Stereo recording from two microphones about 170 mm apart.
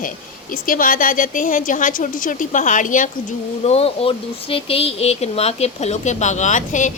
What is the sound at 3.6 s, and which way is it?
A woman's voice, 35° left (ahead or behind).